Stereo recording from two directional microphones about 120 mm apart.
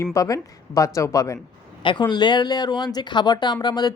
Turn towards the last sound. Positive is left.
turn(degrees=35)  # may be behind; listen again after turning